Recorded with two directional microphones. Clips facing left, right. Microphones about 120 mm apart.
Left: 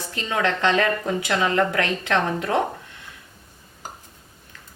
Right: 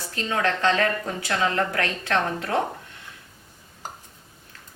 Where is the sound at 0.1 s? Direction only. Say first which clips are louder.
Left 1 dB; 20° left (ahead or behind).